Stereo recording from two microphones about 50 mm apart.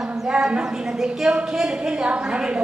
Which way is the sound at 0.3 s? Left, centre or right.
Centre.